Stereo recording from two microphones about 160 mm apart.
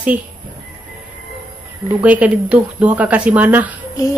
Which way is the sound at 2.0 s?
10° right (ahead or behind).